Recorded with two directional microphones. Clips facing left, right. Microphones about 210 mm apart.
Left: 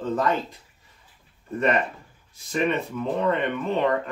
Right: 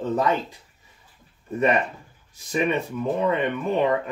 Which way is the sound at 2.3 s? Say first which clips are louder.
Right 1 dB; 15° right (ahead or behind).